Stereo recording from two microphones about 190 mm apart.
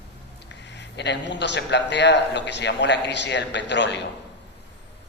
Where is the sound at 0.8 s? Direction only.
65° left (ahead or behind).